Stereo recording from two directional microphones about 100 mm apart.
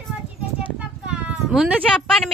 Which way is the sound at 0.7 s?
15° right (ahead or behind).